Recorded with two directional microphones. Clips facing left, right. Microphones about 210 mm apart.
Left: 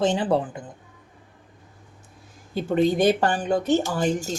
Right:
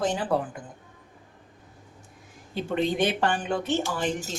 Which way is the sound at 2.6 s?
40° left (ahead or behind).